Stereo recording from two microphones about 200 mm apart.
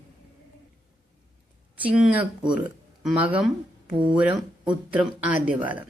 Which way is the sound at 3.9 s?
25° right (ahead or behind).